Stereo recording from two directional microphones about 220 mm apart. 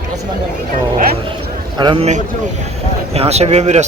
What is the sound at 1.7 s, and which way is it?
Speech, 20° right (ahead or behind).